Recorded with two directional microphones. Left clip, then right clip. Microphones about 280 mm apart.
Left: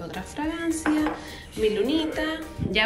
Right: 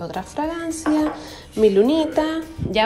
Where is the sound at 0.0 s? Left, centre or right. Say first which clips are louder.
Right 6 dB; centre.